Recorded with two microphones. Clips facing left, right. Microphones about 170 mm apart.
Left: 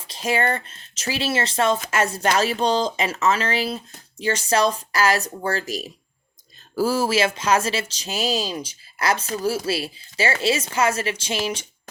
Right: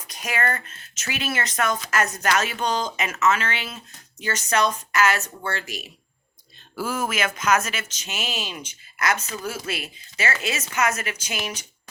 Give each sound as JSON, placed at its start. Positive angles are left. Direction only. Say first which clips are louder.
{"t": 0.0, "sound": "speech", "louder": "left 5 dB", "side_deg": 30}